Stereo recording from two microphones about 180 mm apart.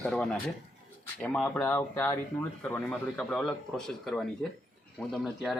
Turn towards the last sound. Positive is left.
turn(degrees=0)  # may be behind; listen again after turning